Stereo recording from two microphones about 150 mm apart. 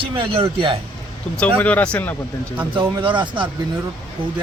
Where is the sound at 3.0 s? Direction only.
35° right (ahead or behind).